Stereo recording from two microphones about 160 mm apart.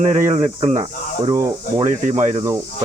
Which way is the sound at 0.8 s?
25° right (ahead or behind).